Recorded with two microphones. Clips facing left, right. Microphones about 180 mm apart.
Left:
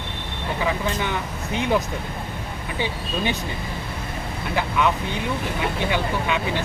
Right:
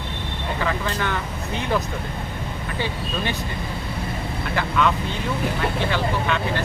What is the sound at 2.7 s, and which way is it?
Speech, 15° left (ahead or behind).